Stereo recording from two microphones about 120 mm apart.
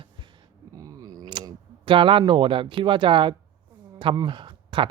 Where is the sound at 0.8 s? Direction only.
30° right (ahead or behind).